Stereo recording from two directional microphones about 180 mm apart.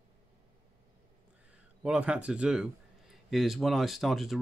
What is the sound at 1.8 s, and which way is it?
Speech, 5° right (ahead or behind).